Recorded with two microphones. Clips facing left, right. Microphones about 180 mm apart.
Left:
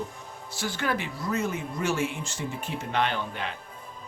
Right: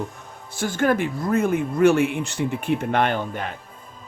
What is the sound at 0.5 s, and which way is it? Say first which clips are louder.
Speech: right 9 dB; 50° right (ahead or behind).